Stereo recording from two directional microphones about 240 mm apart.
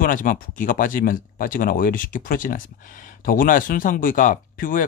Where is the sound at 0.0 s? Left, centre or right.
Left.